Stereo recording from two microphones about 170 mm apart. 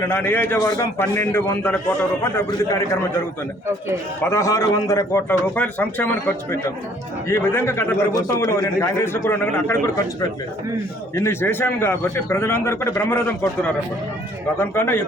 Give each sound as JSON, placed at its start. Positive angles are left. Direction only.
{"t": 0.1, "sound": "a man's voice", "side_deg": 10}
{"t": 4.2, "sound": "a man's voice", "side_deg": 15}
{"t": 11.1, "sound": "a man's voice", "side_deg": 15}